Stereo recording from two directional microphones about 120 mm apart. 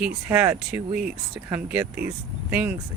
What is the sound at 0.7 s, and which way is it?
Speech, 10° right (ahead or behind).